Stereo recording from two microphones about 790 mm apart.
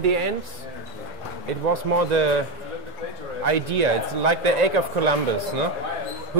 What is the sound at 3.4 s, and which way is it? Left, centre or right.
Speech, right.